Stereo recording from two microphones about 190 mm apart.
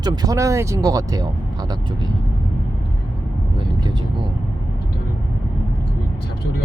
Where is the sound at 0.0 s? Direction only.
20° right (ahead or behind).